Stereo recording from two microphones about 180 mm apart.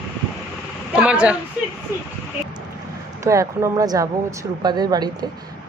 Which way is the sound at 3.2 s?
15° right (ahead or behind).